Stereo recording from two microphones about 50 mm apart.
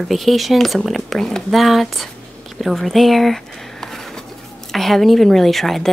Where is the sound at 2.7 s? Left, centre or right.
Centre.